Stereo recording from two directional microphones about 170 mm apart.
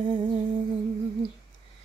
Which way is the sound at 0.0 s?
25° right (ahead or behind).